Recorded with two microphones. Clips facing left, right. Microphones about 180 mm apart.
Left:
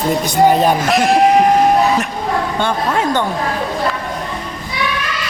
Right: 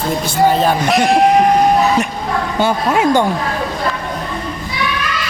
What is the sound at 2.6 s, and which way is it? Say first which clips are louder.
Speech: right 6 dB; 10° right (ahead or behind).